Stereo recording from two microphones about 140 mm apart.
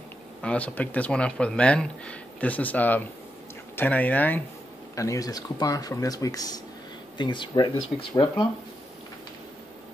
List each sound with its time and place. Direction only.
0.4 s speech: 10° left (ahead or behind)
4.9 s speech: 25° left (ahead or behind)